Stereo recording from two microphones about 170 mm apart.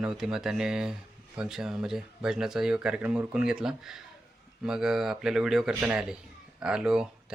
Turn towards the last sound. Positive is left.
turn(degrees=-5)  # may be behind; listen again after turning